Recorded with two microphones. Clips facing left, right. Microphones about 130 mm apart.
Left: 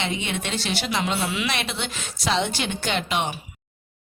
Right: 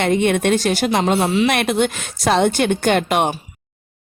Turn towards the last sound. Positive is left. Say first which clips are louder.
# right 9 dB
turn(degrees=-55)  # may be behind; listen again after turning